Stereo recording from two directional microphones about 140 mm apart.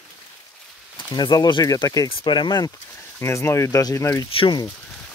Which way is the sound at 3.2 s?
20° left (ahead or behind).